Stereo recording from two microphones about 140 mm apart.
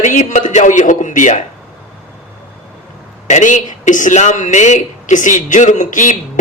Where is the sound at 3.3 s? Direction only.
60° left (ahead or behind).